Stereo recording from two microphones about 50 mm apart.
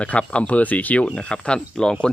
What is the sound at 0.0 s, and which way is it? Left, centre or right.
Speech, left.